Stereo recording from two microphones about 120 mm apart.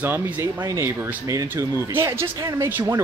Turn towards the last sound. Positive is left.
turn(degrees=-20)  # may be behind; listen again after turning